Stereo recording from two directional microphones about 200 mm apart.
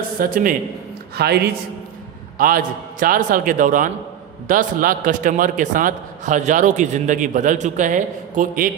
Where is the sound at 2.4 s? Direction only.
45° right (ahead or behind).